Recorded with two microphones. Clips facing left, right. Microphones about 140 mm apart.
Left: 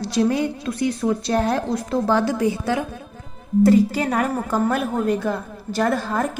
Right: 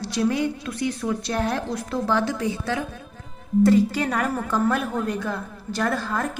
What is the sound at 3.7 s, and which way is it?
A woman's voice, 30° left (ahead or behind).